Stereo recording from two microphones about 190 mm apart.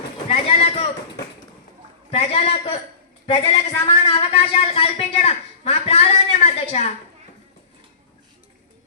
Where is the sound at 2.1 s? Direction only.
30° left (ahead or behind).